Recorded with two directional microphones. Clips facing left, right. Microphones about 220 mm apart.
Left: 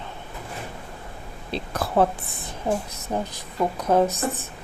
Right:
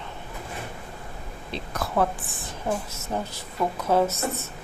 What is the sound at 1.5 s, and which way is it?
A woman's voice, 30° left (ahead or behind).